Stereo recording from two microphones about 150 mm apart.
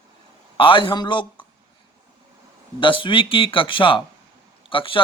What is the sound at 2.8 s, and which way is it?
Speech, 35° left (ahead or behind).